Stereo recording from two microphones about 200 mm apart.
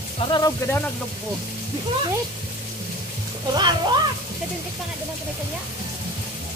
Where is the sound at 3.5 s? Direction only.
20° right (ahead or behind).